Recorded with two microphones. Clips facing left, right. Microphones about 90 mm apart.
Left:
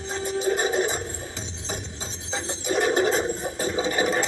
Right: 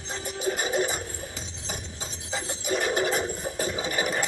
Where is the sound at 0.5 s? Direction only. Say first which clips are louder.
Left 3 dB; 25° left (ahead or behind).